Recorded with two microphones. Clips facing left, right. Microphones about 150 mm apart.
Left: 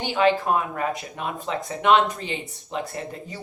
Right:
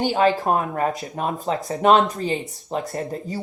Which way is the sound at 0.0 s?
45° right (ahead or behind).